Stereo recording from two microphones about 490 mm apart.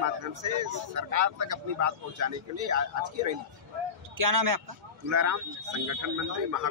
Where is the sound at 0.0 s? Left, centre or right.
Right.